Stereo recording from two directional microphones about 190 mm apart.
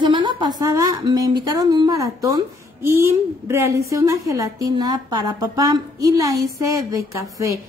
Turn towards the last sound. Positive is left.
turn(degrees=-15)  # may be behind; listen again after turning